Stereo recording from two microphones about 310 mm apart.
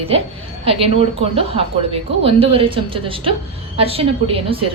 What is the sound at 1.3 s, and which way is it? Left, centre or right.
Speech, centre.